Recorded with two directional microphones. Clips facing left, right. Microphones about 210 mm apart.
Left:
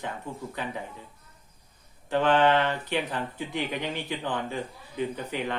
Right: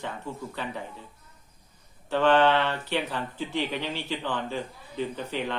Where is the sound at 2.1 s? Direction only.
10° left (ahead or behind).